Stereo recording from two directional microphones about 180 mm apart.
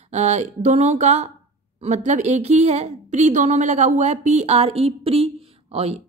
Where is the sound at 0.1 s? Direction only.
40° right (ahead or behind).